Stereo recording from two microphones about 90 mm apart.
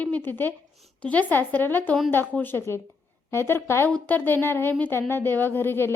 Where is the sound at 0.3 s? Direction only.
20° left (ahead or behind).